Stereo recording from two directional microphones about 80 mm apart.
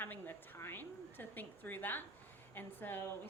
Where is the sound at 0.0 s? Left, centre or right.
Left.